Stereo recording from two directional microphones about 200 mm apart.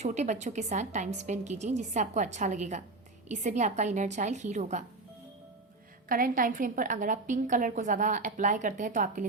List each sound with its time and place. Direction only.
0.0 s a woman's voice: 35° right (ahead or behind)
6.1 s a woman's voice: 45° right (ahead or behind)